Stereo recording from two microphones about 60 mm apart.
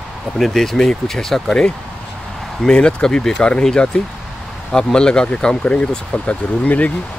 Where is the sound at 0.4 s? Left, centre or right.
Centre; by 6.9 s left.